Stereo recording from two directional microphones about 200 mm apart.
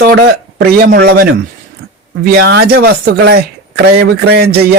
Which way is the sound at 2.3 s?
55° right (ahead or behind).